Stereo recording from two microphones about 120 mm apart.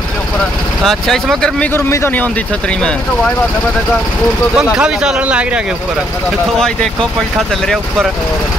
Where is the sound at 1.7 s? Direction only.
20° left (ahead or behind).